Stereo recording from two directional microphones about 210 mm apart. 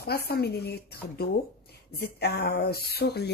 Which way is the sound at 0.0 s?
50° left (ahead or behind).